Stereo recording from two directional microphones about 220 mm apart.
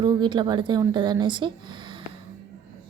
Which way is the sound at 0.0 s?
20° right (ahead or behind).